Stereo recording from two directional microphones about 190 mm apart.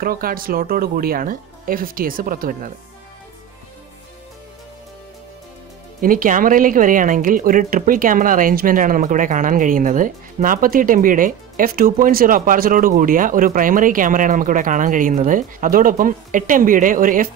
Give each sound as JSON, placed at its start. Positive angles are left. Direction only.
{"t": 0.0, "sound": "speech", "side_deg": -50}
{"t": 5.9, "sound": "speech", "side_deg": -45}